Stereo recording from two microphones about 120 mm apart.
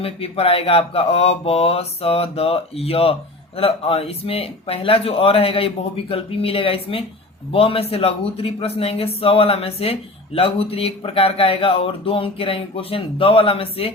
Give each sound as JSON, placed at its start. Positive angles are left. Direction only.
{"t": 0.0, "sound": "mantra", "side_deg": 55}